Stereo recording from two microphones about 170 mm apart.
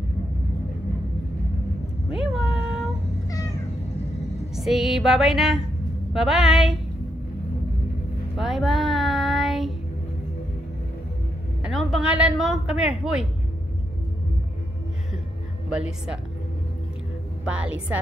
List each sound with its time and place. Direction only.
2.1 s a sound: 5° right (ahead or behind)
3.3 s cat: 20° left (ahead or behind)
4.6 s a woman's voice: centre (ahead or behind)
8.4 s child singing: centre (ahead or behind)
11.6 s a woman's voice: centre (ahead or behind)
17.5 s a woman's voice: 5° right (ahead or behind)